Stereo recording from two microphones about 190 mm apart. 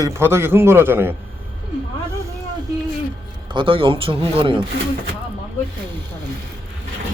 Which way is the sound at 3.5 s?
25° right (ahead or behind).